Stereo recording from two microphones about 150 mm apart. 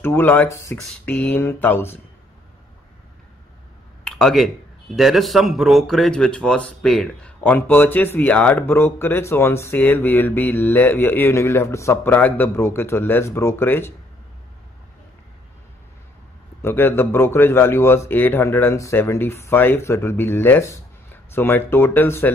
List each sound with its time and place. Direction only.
0.0 s a man's voice: 15° left (ahead or behind)
4.0 s a sound: 5° left (ahead or behind)
4.9 s a man's voice: centre (ahead or behind); by 13.9 s 15° left (ahead or behind)
16.6 s a man's voice: 15° left (ahead or behind)